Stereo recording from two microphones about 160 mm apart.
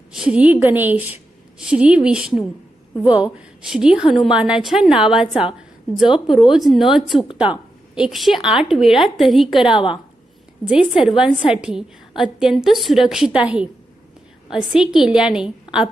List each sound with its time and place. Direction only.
0.1 s a woman's voice: 5° right (ahead or behind)
9.7 s a woman's voice: 30° left (ahead or behind)
10.7 s a woman's voice: 5° right (ahead or behind)